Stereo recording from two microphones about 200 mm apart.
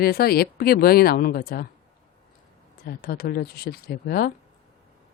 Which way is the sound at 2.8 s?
50° left (ahead or behind).